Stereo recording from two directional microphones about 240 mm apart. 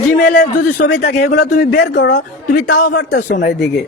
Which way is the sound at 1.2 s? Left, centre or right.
Left.